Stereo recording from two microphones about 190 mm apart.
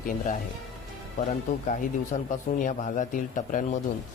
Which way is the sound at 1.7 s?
40° left (ahead or behind).